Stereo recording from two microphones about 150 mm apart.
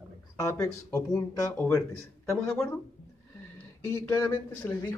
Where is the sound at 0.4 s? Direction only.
20° left (ahead or behind).